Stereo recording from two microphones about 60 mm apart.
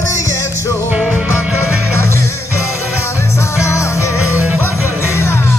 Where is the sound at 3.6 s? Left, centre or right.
Left.